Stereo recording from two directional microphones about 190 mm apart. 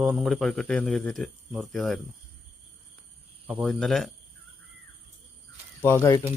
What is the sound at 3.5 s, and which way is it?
Speech, centre (ahead or behind).